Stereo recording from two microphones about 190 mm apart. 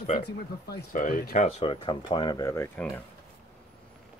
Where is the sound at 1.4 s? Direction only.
30° left (ahead or behind); by 3.0 s 10° left (ahead or behind).